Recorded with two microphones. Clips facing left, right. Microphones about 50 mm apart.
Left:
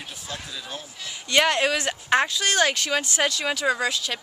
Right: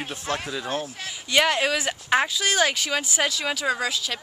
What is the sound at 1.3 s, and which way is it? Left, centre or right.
Speech, centre.